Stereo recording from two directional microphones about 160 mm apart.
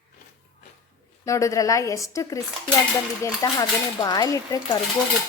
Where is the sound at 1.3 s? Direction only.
20° left (ahead or behind).